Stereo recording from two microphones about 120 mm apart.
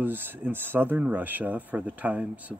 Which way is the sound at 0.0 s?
15° right (ahead or behind).